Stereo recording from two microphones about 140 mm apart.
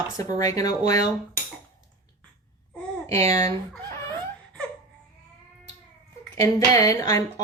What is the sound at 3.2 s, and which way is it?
Speech, 55° right (ahead or behind).